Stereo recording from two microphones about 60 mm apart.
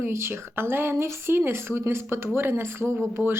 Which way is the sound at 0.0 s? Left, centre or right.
Right.